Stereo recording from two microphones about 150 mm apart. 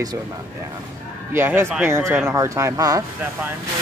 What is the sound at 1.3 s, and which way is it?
Speech, 15° right (ahead or behind).